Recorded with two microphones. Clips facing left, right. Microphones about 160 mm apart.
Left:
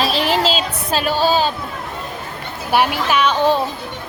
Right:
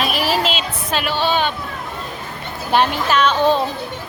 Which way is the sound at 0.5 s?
40° left (ahead or behind).